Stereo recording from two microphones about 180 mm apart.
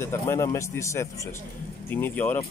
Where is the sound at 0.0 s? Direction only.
15° left (ahead or behind).